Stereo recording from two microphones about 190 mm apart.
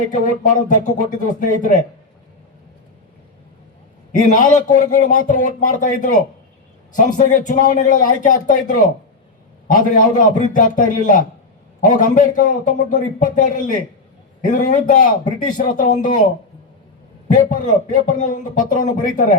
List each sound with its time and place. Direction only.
0.1 s a man's voice: 40° left (ahead or behind)
4.1 s a man's voice: 40° left (ahead or behind)
7.2 s a man's voice: 45° left (ahead or behind)
17.3 s a man's voice: 45° left (ahead or behind)